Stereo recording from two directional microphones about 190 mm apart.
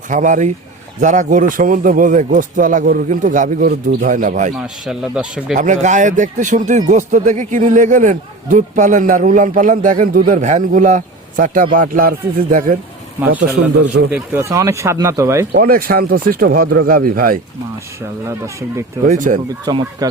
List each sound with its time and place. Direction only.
0.1 s speech: 40° right (ahead or behind)
4.5 s a man's voice: 5° right (ahead or behind)
5.5 s speech: 40° right (ahead or behind)
14.1 s speech: 15° right (ahead or behind)
15.5 s speech: 50° right (ahead or behind)
18.3 s speech: 15° right (ahead or behind)
19.0 s speech: 40° right (ahead or behind)
19.6 s speech: 20° right (ahead or behind)